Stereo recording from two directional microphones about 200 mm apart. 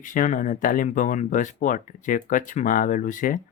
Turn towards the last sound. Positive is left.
turn(degrees=40)  # may be behind; listen again after turning